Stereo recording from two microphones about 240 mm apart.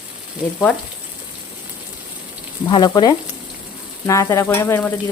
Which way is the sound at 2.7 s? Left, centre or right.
Centre.